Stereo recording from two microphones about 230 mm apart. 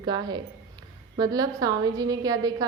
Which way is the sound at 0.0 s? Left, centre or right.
Centre.